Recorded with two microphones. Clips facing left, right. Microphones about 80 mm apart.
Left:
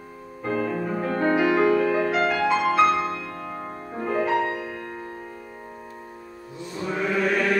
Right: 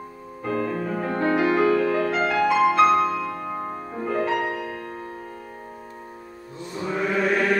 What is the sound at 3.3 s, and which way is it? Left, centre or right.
Music, centre.